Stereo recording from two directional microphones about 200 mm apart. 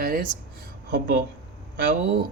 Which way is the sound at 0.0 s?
45° right (ahead or behind).